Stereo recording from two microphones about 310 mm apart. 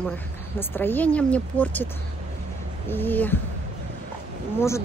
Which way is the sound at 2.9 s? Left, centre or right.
Centre.